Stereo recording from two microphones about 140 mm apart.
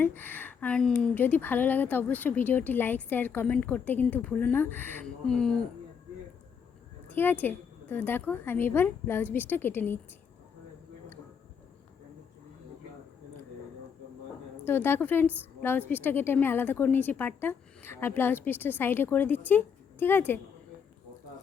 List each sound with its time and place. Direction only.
0.0 s speech: 15° left (ahead or behind)
7.1 s speech: 15° left (ahead or behind)
14.6 s a woman's voice: 15° left (ahead or behind)